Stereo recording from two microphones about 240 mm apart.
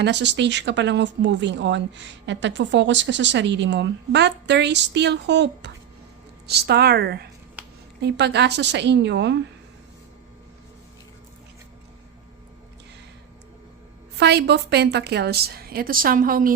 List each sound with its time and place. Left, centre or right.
0.0 s speech: right
7.6 s a sound: centre
8.0 s speech: right
14.2 s a woman's voice: right